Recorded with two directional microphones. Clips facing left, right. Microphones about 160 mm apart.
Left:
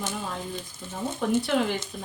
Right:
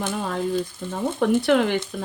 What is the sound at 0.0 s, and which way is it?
Speech, 65° right (ahead or behind).